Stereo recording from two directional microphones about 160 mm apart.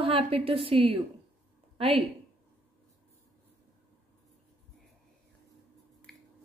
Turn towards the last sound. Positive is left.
turn(degrees=0)  # may be behind; listen again after turning